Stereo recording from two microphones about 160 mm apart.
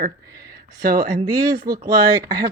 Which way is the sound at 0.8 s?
65° right (ahead or behind).